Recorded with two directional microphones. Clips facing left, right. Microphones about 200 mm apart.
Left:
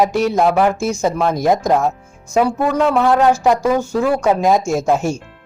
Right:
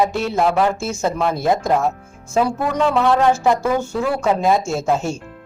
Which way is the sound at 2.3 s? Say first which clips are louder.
Left 3 dB; 5° left (ahead or behind).